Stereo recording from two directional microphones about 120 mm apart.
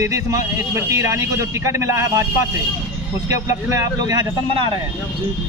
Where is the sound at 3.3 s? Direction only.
25° right (ahead or behind).